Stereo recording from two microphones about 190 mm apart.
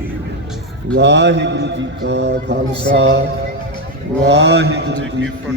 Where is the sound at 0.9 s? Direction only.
65° right (ahead or behind).